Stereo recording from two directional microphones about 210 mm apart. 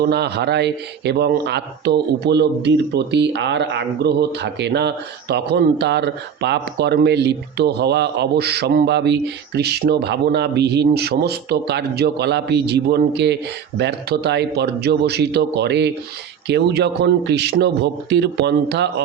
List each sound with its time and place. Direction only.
0.0 s speech: 50° right (ahead or behind)